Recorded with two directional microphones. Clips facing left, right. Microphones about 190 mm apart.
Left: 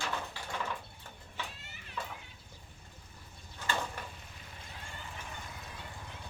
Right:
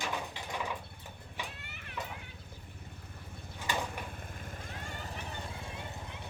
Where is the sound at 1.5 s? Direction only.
60° right (ahead or behind).